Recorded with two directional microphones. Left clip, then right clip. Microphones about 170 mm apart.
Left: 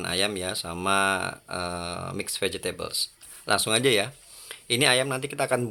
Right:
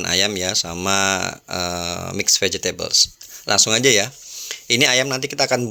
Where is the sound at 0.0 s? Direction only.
35° right (ahead or behind).